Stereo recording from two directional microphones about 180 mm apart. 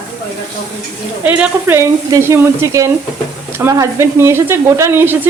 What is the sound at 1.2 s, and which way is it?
Speech, 10° right (ahead or behind).